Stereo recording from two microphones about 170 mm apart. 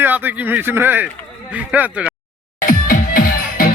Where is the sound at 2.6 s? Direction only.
55° left (ahead or behind).